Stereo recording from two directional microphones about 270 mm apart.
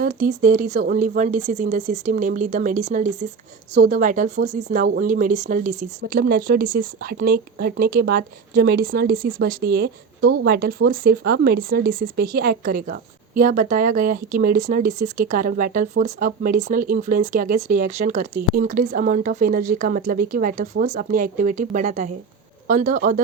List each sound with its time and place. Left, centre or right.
0.0 s speech: right